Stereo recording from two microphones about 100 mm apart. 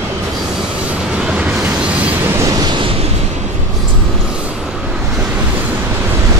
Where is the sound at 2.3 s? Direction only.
35° right (ahead or behind).